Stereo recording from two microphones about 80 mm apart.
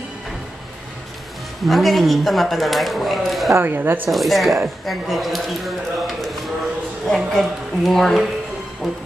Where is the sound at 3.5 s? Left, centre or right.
Right.